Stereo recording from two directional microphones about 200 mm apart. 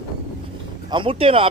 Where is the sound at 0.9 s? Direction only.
25° right (ahead or behind).